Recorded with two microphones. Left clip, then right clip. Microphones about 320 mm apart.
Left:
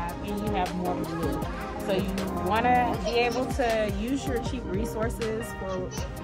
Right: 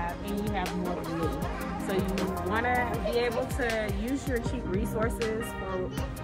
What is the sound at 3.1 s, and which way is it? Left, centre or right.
Speech, centre.